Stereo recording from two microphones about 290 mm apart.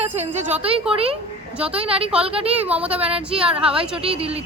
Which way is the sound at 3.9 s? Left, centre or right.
Centre.